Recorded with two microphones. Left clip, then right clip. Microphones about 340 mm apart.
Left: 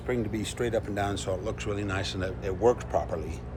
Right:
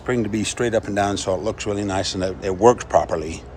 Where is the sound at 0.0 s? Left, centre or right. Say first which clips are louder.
Right 8 dB; right.